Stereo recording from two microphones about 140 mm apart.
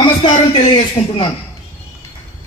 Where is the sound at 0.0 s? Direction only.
40° left (ahead or behind).